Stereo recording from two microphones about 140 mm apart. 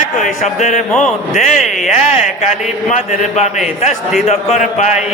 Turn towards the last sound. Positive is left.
turn(degrees=60)  # may be behind; listen again after turning